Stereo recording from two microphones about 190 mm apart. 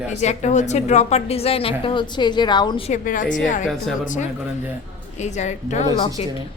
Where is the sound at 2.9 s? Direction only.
45° left (ahead or behind).